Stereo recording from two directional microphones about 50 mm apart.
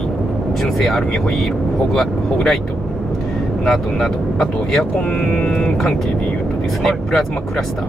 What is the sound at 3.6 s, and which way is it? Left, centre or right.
Speech, centre.